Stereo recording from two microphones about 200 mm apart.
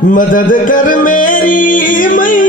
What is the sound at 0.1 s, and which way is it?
Music, 40° left (ahead or behind).